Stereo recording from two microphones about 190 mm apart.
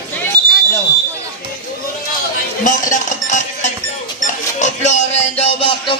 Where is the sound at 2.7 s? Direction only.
45° left (ahead or behind).